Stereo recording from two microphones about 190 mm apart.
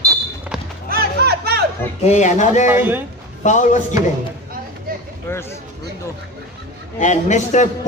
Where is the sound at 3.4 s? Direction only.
40° left (ahead or behind).